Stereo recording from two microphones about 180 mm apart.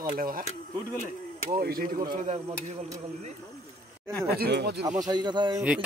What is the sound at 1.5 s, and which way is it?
Speech, 55° right (ahead or behind).